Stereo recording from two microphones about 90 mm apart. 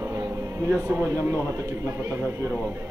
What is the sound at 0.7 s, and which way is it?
Speech, 25° right (ahead or behind).